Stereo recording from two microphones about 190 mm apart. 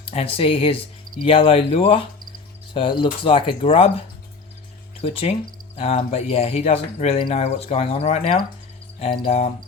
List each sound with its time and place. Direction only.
0.1 s speech: 30° left (ahead or behind)